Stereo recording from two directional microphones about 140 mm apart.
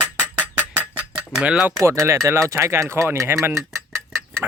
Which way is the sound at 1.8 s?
20° right (ahead or behind).